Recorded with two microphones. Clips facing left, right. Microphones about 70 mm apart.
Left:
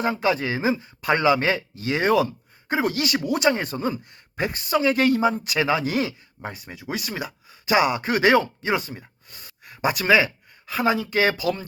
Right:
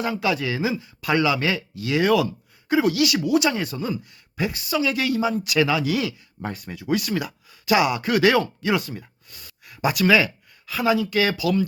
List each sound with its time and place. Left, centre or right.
0.0 s speech: left
6.4 s speech: centre